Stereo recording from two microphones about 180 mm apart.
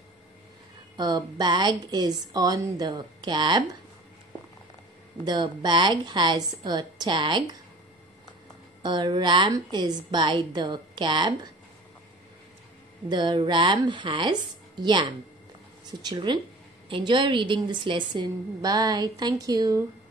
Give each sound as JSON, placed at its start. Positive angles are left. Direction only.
{"t": 0.9, "sound": "a woman's voice", "side_deg": -25}
{"t": 5.2, "sound": "a woman's voice", "side_deg": -25}
{"t": 8.8, "sound": "a woman's voice", "side_deg": -25}
{"t": 13.1, "sound": "a woman's voice", "side_deg": -25}